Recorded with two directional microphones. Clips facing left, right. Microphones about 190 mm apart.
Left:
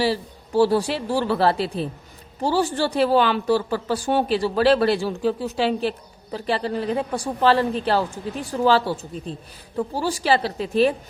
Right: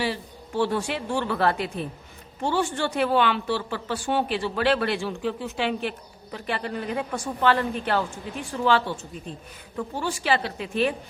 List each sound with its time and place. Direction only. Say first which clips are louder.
0.0 s speech: left 6 dB; 35° left (ahead or behind)